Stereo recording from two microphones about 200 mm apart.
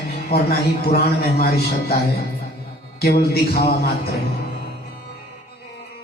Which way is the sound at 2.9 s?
50° left (ahead or behind).